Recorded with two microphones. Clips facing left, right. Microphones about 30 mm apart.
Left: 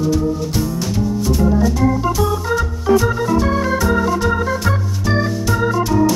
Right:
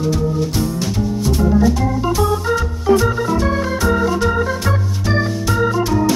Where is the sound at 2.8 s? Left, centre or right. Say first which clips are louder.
Even; centre.